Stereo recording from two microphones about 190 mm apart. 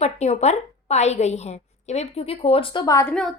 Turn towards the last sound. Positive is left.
turn(degrees=20)  # may be behind; listen again after turning